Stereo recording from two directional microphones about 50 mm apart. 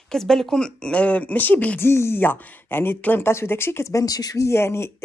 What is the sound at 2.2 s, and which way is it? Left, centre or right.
Speech, left.